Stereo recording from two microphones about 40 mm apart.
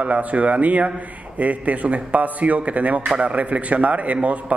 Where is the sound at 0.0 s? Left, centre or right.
Right.